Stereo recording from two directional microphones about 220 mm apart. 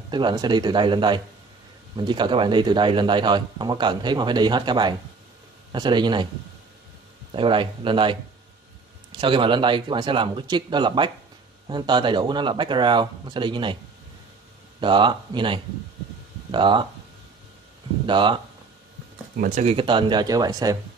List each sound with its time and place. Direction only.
0.1 s a man's voice: 20° right (ahead or behind)
7.3 s a man's voice: 25° right (ahead or behind)
9.2 s a man's voice: 20° right (ahead or behind)
14.8 s a man's voice: 20° right (ahead or behind)
18.0 s a man's voice: 20° right (ahead or behind)
19.3 s a man's voice: 35° right (ahead or behind); by 20.7 s 15° right (ahead or behind)